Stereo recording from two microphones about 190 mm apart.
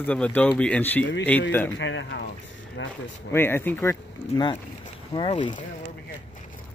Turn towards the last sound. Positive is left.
turn(degrees=25)  # may be behind; listen again after turning